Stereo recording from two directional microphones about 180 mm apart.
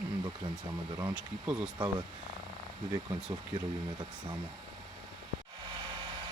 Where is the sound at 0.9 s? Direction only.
10° right (ahead or behind).